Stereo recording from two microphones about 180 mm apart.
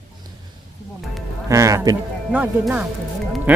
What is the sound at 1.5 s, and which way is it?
Speech, 15° right (ahead or behind).